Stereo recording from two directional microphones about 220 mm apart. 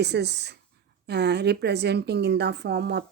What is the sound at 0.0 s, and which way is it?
Speech, 50° right (ahead or behind).